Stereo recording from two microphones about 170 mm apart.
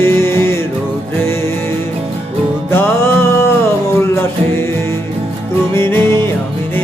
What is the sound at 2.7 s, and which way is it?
Music, 15° left (ahead or behind).